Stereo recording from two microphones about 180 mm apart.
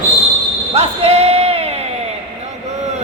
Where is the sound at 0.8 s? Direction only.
35° right (ahead or behind).